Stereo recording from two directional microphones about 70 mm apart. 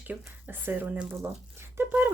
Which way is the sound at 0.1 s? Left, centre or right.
Right.